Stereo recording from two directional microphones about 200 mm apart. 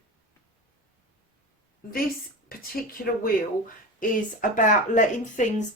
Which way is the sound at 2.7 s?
45° left (ahead or behind).